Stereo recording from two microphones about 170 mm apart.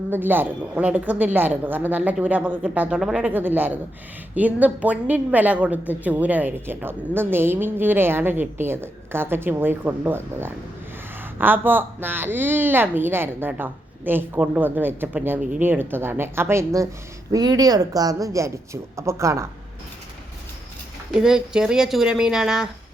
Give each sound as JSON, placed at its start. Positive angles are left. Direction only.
{"t": 0.1, "sound": "a woman's voice", "side_deg": -10}
{"t": 21.1, "sound": "speech", "side_deg": -5}